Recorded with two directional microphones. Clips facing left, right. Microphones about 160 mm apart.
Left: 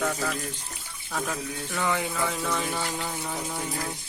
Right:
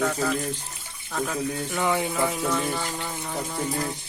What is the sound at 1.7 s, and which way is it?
Speech, 15° right (ahead or behind).